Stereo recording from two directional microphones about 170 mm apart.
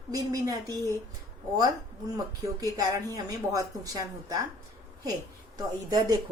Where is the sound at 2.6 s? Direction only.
20° right (ahead or behind).